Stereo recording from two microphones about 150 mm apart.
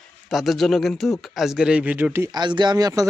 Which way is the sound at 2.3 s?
30° right (ahead or behind).